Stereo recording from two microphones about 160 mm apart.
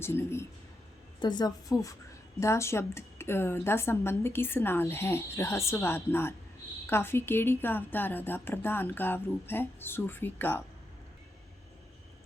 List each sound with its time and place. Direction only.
0.0 s a woman's voice: 15° left (ahead or behind)
1.2 s a woman's voice: 25° left (ahead or behind); by 10.6 s 10° left (ahead or behind)